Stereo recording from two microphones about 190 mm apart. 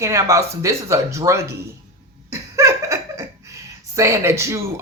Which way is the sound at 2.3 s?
15° right (ahead or behind).